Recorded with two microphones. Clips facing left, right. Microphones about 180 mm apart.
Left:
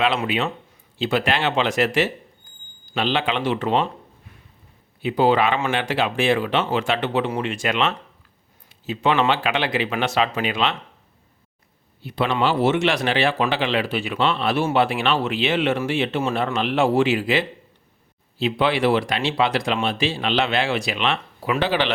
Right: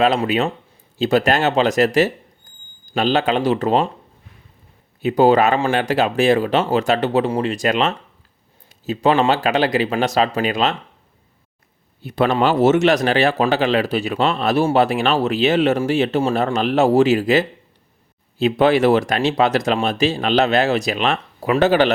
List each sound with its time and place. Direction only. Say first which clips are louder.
0.0 s speech: right 5 dB; 40° right (ahead or behind)
5.0 s speech: right 5 dB; 45° right (ahead or behind)
12.0 s speech: right 4 dB; 45° right (ahead or behind)